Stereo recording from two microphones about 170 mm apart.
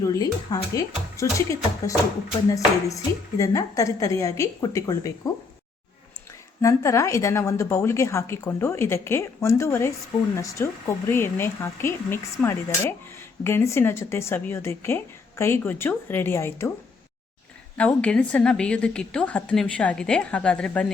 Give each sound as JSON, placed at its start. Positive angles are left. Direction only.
{"t": 0.0, "sound": "a woman's voice", "side_deg": 20}
{"t": 6.6, "sound": "a woman's voice", "side_deg": 15}
{"t": 17.7, "sound": "a woman's voice", "side_deg": 5}